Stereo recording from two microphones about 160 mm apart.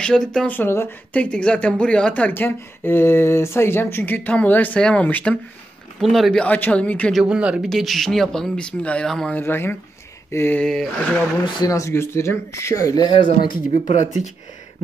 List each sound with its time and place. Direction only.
0.0 s speech: 5° left (ahead or behind)
9.4 s speech: 15° left (ahead or behind)
11.4 s speech: 25° left (ahead or behind)
13.8 s speech: 50° left (ahead or behind)